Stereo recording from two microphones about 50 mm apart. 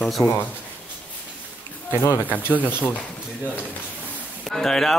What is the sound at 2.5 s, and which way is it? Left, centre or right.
Speech, left.